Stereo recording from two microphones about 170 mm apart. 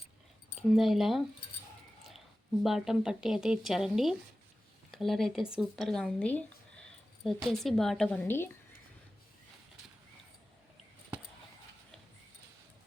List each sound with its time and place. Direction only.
0.7 s speech: centre (ahead or behind)
2.6 s speech: centre (ahead or behind)